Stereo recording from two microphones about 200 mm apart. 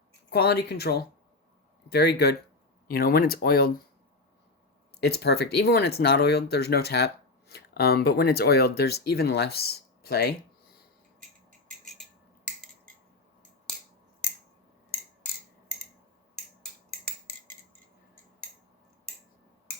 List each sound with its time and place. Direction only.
0.3 s speech: 55° left (ahead or behind)
4.9 s speech: 55° left (ahead or behind)